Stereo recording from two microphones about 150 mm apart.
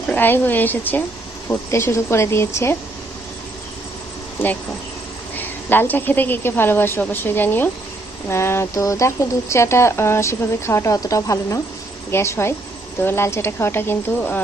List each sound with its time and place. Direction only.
0.1 s a woman's voice: 15° left (ahead or behind)
5.4 s a woman's voice: 15° left (ahead or behind)